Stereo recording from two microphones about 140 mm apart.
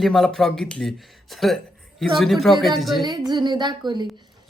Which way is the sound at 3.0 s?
30° right (ahead or behind).